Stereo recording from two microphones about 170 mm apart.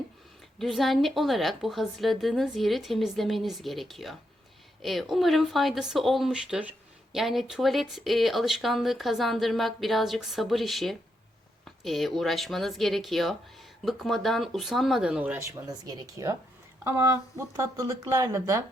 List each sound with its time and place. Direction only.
0.6 s speech: centre (ahead or behind); by 18.6 s 15° right (ahead or behind)